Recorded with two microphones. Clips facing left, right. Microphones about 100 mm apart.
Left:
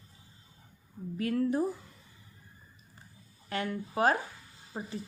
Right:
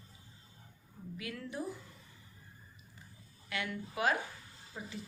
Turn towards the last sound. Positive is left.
turn(degrees=45)  # may be behind; listen again after turning